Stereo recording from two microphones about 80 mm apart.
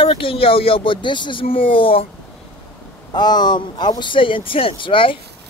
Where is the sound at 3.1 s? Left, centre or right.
Left.